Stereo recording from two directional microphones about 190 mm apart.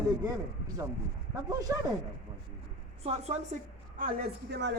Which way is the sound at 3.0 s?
35° right (ahead or behind).